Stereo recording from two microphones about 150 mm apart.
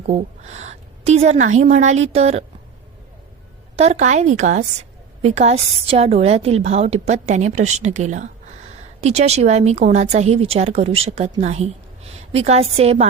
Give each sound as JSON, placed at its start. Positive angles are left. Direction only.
{"t": 0.1, "sound": "a woman's voice", "side_deg": -50}
{"t": 3.8, "sound": "a woman's voice", "side_deg": -50}